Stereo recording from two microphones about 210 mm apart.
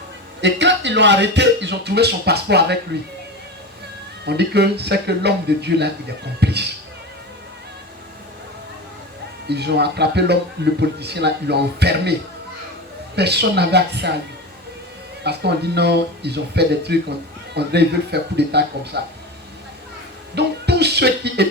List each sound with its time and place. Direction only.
0.4 s speech: 55° right (ahead or behind)
4.3 s speech: 50° right (ahead or behind)
9.5 s speech: 50° right (ahead or behind)
13.1 s speech: 50° right (ahead or behind)
15.2 s speech: 50° right (ahead or behind)
20.3 s music: 50° right (ahead or behind)